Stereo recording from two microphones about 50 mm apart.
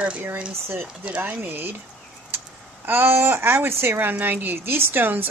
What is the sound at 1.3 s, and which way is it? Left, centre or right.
Speech, right.